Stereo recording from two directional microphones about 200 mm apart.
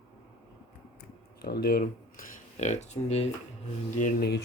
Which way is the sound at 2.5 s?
35° left (ahead or behind).